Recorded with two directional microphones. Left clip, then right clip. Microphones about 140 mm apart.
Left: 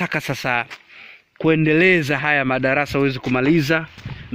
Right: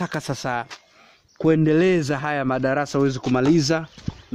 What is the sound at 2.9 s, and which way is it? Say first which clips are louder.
Speech: left 1 dB; 20° right (ahead or behind).